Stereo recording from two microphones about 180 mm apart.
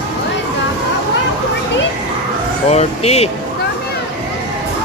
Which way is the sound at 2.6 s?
35° left (ahead or behind).